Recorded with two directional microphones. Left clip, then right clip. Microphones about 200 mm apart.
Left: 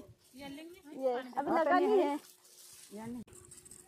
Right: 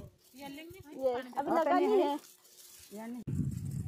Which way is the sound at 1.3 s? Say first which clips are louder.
Right 1 dB; 25° left (ahead or behind).